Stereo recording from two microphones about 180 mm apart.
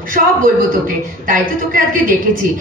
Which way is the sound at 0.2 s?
45° right (ahead or behind).